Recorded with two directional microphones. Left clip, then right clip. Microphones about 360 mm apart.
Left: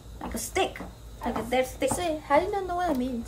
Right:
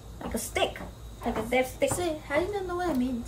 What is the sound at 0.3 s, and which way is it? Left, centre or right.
Speech, centre.